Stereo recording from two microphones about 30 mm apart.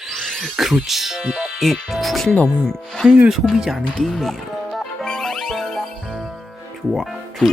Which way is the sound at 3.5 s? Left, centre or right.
Centre.